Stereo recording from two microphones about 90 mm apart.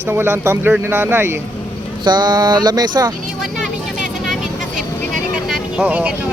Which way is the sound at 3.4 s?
5° right (ahead or behind).